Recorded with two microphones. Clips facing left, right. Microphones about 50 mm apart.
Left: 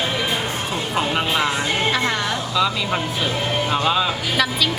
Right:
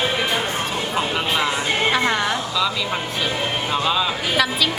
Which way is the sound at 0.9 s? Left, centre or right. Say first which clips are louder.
Left 2 dB; centre.